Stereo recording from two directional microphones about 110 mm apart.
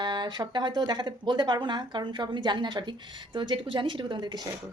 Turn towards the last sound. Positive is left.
turn(degrees=-40)  # may be behind; listen again after turning